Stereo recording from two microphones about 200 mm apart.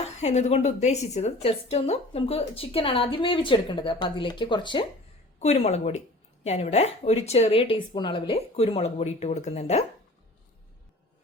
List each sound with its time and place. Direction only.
0.0 s a woman's voice: 35° left (ahead or behind)
5.4 s a woman's voice: 35° left (ahead or behind)